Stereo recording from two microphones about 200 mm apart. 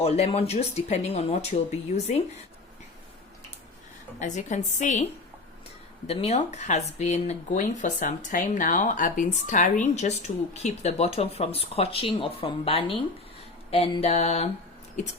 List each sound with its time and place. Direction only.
0.0 s speech: 30° left (ahead or behind)
4.2 s speech: 35° left (ahead or behind)
6.1 s speech: 30° left (ahead or behind)